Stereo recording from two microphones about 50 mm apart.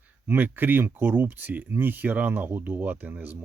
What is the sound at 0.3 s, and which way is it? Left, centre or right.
Speech, right.